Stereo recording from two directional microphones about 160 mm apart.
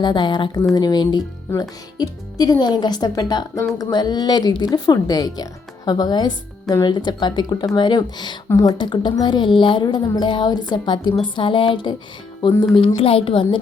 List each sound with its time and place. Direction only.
0.0 s speech: 30° left (ahead or behind)
13.0 s a woman's voice: 35° left (ahead or behind)